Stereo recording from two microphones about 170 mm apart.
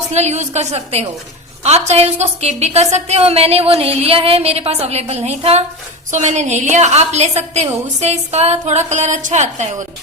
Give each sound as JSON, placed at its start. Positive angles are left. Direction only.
{"t": 0.1, "sound": "a woman's voice", "side_deg": -40}